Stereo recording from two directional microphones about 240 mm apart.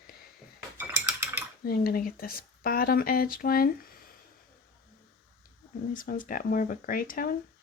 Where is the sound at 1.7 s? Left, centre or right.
Left.